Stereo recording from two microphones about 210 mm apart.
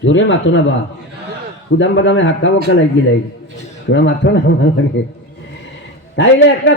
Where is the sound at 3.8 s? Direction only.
60° left (ahead or behind).